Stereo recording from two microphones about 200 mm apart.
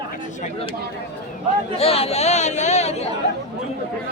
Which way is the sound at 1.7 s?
30° left (ahead or behind).